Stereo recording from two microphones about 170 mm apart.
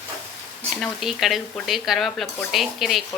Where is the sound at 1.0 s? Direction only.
Centre (ahead or behind).